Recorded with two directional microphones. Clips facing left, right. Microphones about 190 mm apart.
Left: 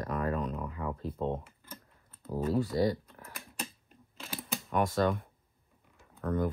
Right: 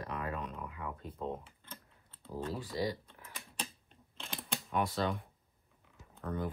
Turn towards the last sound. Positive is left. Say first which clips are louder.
# left 7 dB
turn(degrees=50)  # may be behind; listen again after turning